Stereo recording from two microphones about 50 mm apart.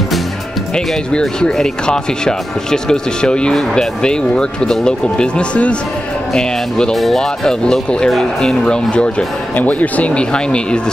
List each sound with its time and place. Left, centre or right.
1.2 s speech: centre
7.0 s speech: centre
7.4 s speech: centre
8.6 s speech: left
9.6 s speech: left